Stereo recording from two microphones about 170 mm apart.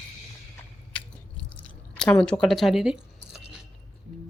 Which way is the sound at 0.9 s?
5° left (ahead or behind).